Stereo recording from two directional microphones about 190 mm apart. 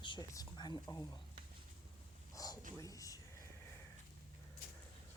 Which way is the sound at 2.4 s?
20° left (ahead or behind).